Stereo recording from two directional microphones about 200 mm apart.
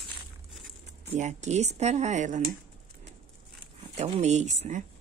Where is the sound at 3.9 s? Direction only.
35° right (ahead or behind).